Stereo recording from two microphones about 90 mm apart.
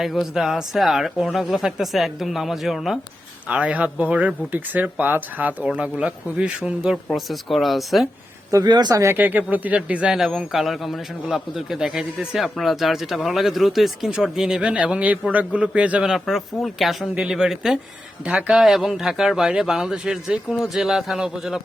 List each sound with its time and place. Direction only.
0.0 s speech: 5° right (ahead or behind)
3.5 s speech: 15° right (ahead or behind)
8.6 s speech: 55° right (ahead or behind)
9.1 s speech: 20° right (ahead or behind)